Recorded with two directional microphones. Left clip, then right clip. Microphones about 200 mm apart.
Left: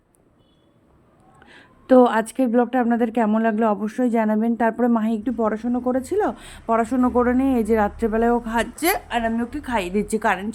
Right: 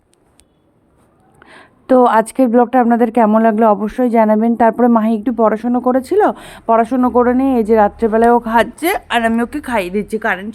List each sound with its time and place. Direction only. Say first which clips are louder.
1.4 s a woman's voice: right 7 dB; 20° right (ahead or behind)
9.0 s a woman's voice: right 8 dB; 45° right (ahead or behind)
9.6 s a woman's voice: right 6 dB; 20° right (ahead or behind)
9.9 s a woman's voice: right 4 dB; centre (ahead or behind)